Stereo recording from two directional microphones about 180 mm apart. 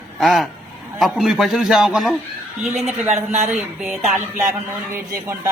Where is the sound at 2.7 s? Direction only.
35° right (ahead or behind).